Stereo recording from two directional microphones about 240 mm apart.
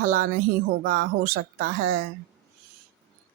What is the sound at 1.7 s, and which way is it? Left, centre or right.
Speech, right.